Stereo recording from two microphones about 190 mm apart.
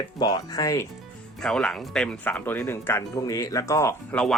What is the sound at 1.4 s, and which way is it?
Speech, 5° left (ahead or behind).